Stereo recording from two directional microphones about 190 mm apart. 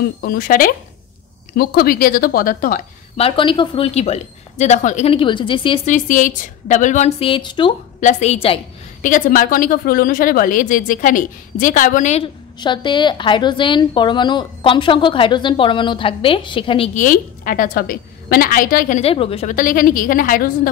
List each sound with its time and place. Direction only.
0.2 s speech: 50° left (ahead or behind)
3.2 s a woman's voice: 30° left (ahead or behind)
5.9 s a woman's voice: 40° left (ahead or behind); by 7.7 s 25° left (ahead or behind)
8.0 s a woman's voice: 40° left (ahead or behind)
9.0 s speech: 45° left (ahead or behind)
12.5 s a woman's voice: 25° left (ahead or behind)
19.5 s speech: 45° left (ahead or behind)